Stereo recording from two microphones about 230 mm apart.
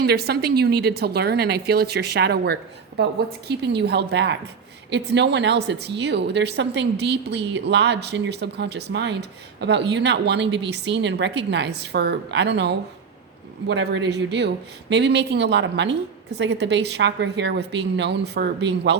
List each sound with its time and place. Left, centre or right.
0.0 s a woman's voice: right
3.6 s a woman's voice: right